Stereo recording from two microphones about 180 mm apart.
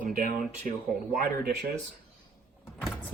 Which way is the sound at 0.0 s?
50° right (ahead or behind).